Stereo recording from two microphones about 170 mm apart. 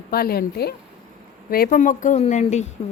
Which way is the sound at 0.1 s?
65° left (ahead or behind).